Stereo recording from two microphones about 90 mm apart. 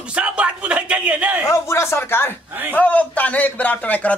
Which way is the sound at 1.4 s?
30° left (ahead or behind).